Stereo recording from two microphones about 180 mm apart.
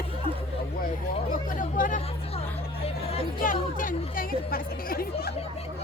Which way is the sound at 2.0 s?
35° left (ahead or behind).